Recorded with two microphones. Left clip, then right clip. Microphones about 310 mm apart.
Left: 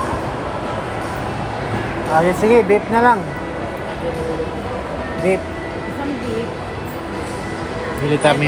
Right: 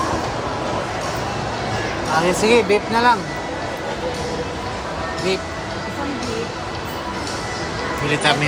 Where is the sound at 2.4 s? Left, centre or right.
Centre.